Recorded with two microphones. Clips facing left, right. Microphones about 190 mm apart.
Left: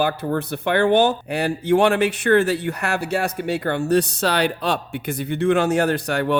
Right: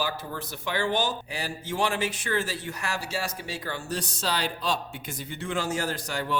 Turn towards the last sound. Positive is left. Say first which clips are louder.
# left 10 dB
turn(degrees=65)  # may be behind; listen again after turning